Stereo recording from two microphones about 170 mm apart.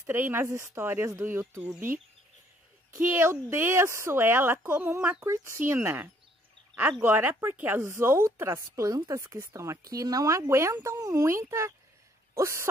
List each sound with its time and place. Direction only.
0.0 s speech: 15° right (ahead or behind)
2.9 s speech: 15° right (ahead or behind)